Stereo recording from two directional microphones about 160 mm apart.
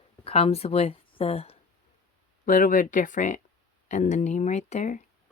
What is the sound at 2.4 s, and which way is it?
Speech, 55° left (ahead or behind).